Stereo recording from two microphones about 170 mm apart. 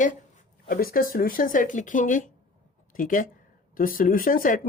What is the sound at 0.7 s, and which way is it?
Speech, 60° left (ahead or behind).